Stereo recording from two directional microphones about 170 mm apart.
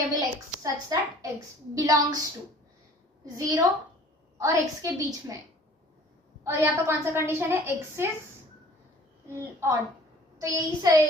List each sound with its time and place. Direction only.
0.6 s a woman's voice: 20° right (ahead or behind)
3.3 s a woman's voice: 20° right (ahead or behind)
6.4 s a woman's voice: 15° right (ahead or behind)
9.3 s a woman's voice: 15° right (ahead or behind)